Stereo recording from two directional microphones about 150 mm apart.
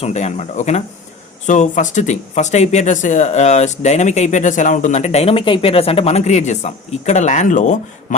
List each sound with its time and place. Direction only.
0.0 s speech: 50° left (ahead or behind)